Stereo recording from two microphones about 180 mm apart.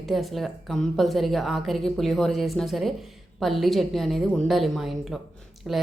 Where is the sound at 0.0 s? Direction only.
Centre (ahead or behind).